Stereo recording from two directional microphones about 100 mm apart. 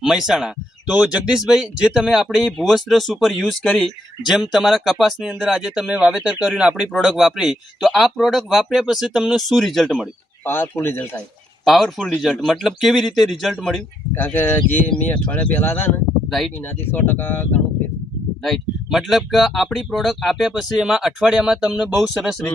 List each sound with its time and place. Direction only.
0.0 s speech: 5° right (ahead or behind)
10.4 s speech: 25° left (ahead or behind)
11.6 s speech: centre (ahead or behind)
14.2 s speech: 20° left (ahead or behind)
18.4 s speech: centre (ahead or behind)